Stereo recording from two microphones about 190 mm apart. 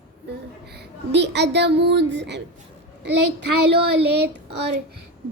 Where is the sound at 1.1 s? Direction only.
65° right (ahead or behind).